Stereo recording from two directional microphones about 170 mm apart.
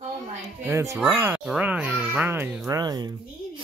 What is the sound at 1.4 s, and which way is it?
Speech, 5° right (ahead or behind).